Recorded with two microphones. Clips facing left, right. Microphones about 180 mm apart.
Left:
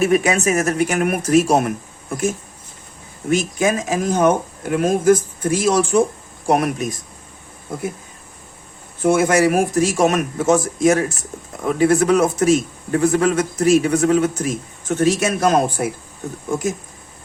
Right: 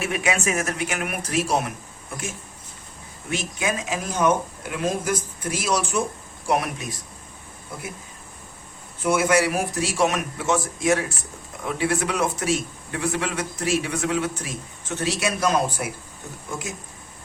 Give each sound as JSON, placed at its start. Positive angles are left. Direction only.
{"t": 0.0, "sound": "a man's voice", "side_deg": 40}
{"t": 3.2, "sound": "a man's voice", "side_deg": 45}
{"t": 9.0, "sound": "a man's voice", "side_deg": 45}